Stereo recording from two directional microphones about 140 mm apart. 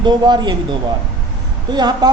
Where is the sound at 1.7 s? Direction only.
30° right (ahead or behind).